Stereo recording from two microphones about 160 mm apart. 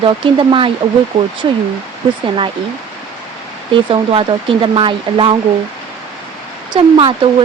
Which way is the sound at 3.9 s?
35° right (ahead or behind).